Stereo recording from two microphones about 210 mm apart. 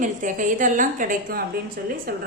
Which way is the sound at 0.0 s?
40° right (ahead or behind).